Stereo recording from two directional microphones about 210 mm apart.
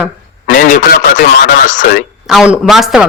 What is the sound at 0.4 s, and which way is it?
Speech, 40° left (ahead or behind).